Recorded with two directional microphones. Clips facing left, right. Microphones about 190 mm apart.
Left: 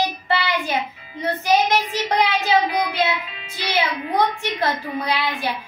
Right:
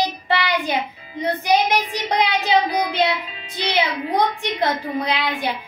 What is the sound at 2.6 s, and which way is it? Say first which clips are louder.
Child singing: right 1 dB; 35° right (ahead or behind).